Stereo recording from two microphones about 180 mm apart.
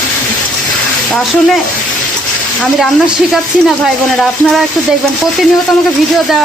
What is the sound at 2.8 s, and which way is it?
Speech, centre (ahead or behind).